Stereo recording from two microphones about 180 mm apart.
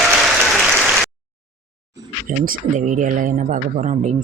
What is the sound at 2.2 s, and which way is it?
Speech, 50° right (ahead or behind).